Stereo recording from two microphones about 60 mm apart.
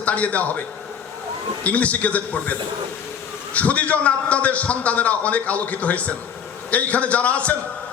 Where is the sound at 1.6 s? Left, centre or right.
Left.